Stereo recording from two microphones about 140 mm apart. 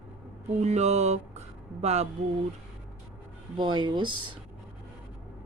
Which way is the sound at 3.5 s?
35° right (ahead or behind).